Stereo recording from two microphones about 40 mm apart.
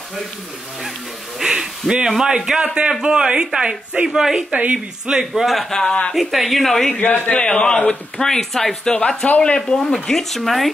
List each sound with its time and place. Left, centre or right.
1.4 s speech: centre
4.1 s speech: centre
4.5 s speech: right
5.1 s speech: centre
5.7 s speech: centre
6.1 s speech: centre
7.0 s a man's voice: left
7.3 s a man's voice: left
8.4 s speech: centre
8.8 s speech: left
9.9 s speech: centre